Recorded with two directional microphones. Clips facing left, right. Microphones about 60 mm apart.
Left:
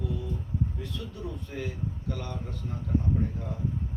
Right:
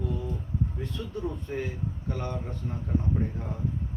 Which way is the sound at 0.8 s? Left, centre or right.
Right.